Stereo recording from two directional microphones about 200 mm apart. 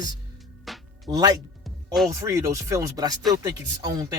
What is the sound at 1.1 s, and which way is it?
Speech, 20° right (ahead or behind).